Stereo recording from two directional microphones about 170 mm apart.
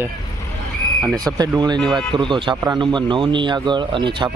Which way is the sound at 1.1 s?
25° right (ahead or behind).